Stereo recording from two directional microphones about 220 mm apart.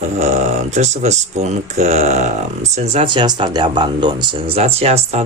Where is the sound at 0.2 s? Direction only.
30° right (ahead or behind).